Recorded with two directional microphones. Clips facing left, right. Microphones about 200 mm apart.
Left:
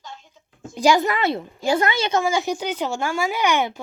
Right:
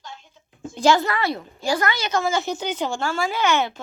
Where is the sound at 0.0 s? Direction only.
5° left (ahead or behind); by 1.5 s 25° left (ahead or behind).